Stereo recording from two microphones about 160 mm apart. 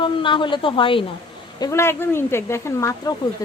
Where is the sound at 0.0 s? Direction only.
30° left (ahead or behind).